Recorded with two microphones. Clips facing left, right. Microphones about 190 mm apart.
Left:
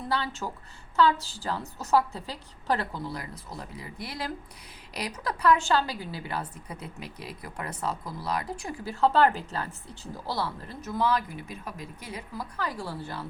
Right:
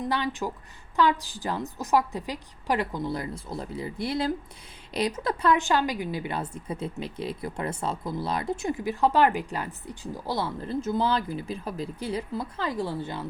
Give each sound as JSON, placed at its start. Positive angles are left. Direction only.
{"t": 0.1, "sound": "a woman's voice", "side_deg": -15}